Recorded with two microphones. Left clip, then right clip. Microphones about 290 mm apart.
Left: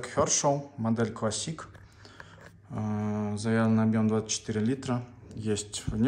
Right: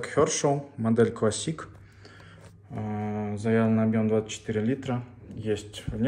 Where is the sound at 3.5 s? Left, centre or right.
Centre.